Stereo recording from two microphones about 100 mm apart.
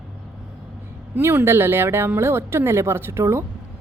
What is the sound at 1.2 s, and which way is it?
Speech, 25° right (ahead or behind).